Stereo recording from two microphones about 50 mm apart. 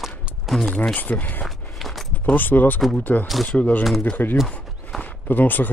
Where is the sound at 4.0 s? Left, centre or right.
Left.